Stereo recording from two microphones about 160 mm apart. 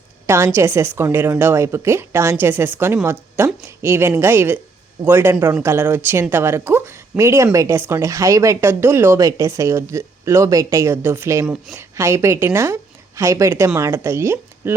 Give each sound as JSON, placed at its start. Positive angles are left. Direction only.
{"t": 0.3, "sound": "speech", "side_deg": -15}
{"t": 11.4, "sound": "speech", "side_deg": -5}
{"t": 11.8, "sound": "speech", "side_deg": -15}